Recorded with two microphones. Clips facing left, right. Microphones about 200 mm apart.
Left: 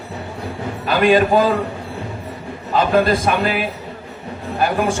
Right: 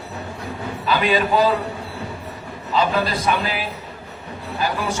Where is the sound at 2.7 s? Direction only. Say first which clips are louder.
Left 5 dB; 50° left (ahead or behind).